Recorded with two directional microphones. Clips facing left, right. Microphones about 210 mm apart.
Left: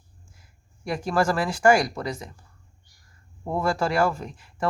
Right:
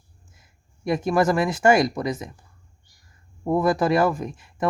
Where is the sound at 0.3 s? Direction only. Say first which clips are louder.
Even; 20° right (ahead or behind).